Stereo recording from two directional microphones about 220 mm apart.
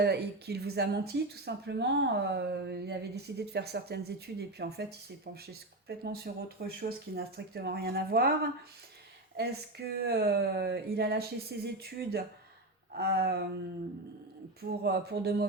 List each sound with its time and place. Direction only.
0.0 s speech: 45° right (ahead or behind)
9.4 s speech: 45° right (ahead or behind)
14.6 s speech: 45° right (ahead or behind)